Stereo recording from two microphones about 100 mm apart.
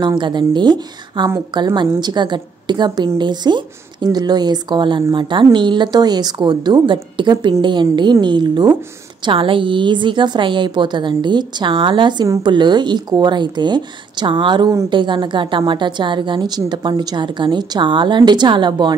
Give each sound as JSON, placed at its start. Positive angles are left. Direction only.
{"t": 0.0, "sound": "a woman's voice", "side_deg": -50}
{"t": 9.2, "sound": "a woman's voice", "side_deg": -60}